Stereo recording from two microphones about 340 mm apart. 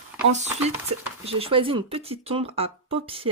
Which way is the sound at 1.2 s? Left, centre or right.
Centre.